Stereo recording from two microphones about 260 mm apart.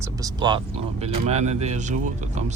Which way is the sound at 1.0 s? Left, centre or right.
Right.